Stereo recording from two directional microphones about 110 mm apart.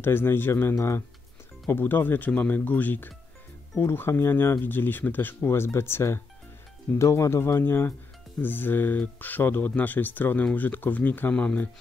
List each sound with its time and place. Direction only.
0.0 s speech: 20° left (ahead or behind)